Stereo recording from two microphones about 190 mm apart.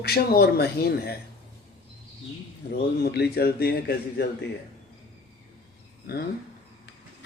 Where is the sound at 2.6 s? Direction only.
55° left (ahead or behind).